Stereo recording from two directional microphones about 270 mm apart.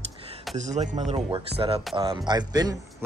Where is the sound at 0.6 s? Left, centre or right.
Right.